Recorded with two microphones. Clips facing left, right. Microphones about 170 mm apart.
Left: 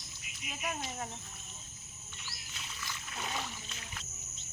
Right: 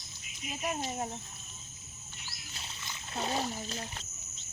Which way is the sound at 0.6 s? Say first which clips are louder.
Right 4 dB; 30° right (ahead or behind).